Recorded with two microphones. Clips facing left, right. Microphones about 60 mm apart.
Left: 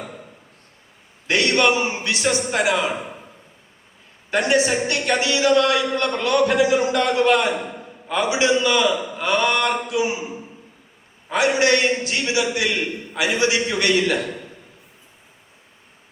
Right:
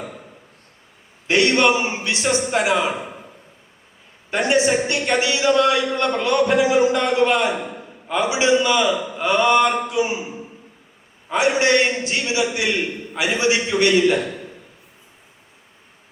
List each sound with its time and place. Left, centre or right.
1.3 s a man's voice: right
4.3 s a man's voice: right
11.3 s a man's voice: right